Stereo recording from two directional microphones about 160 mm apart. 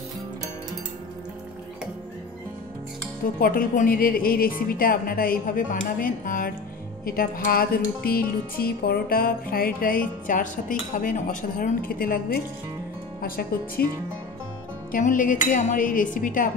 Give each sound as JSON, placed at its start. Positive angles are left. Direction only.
{"t": 3.3, "sound": "a woman's voice", "side_deg": 60}
{"t": 11.9, "sound": "speech", "side_deg": 70}
{"t": 14.9, "sound": "a woman's voice", "side_deg": 55}